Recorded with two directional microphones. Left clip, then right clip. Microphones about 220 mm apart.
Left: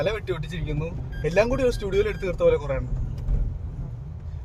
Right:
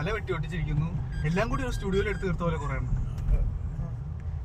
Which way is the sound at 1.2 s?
40° left (ahead or behind).